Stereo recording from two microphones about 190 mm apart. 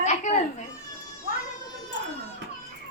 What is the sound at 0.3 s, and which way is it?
Children playing, 40° left (ahead or behind).